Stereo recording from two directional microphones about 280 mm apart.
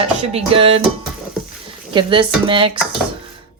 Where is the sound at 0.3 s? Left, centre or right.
Right.